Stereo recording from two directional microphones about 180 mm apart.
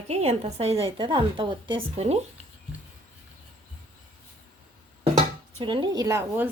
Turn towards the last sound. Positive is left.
turn(degrees=-15)  # may be behind; listen again after turning